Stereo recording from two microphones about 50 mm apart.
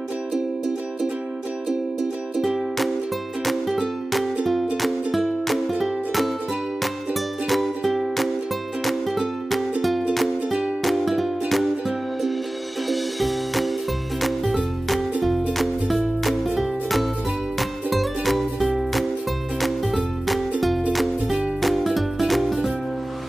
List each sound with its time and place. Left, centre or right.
2.3 s music: centre
12.8 s music: centre